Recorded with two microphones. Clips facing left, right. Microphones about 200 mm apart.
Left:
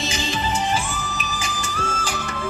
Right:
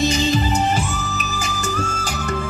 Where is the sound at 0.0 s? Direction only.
40° right (ahead or behind).